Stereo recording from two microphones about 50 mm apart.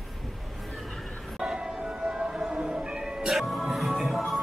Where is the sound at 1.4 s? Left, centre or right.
Centre.